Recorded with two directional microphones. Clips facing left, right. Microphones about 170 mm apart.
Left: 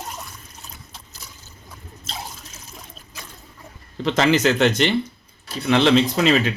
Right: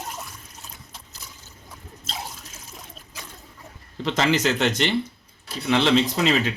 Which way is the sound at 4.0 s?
60° left (ahead or behind).